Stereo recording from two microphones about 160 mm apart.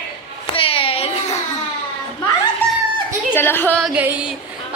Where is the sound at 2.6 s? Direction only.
10° left (ahead or behind).